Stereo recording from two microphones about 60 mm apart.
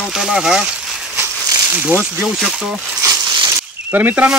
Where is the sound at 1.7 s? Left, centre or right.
Right.